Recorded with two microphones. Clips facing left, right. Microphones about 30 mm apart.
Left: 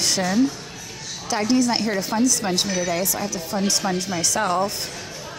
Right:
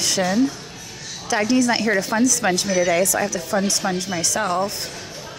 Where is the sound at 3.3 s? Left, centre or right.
Centre.